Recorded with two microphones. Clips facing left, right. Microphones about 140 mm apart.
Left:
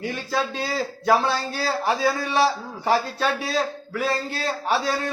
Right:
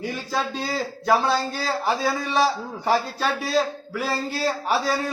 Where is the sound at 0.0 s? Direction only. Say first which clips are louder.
Left 1 dB; centre (ahead or behind).